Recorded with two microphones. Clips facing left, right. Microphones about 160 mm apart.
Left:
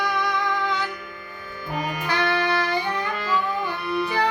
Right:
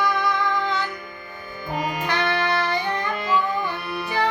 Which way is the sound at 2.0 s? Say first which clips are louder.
Left 1 dB; 10° left (ahead or behind).